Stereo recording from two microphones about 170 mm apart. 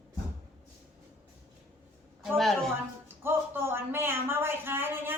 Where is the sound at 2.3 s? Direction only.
Centre (ahead or behind).